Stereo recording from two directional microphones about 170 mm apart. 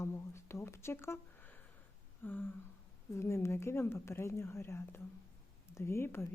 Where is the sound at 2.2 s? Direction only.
10° left (ahead or behind).